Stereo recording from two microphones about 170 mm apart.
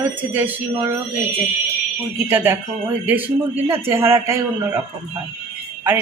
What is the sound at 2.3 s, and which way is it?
Speech, 10° right (ahead or behind).